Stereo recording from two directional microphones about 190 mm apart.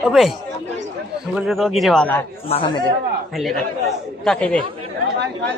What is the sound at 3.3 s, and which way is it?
A man's voice, centre (ahead or behind).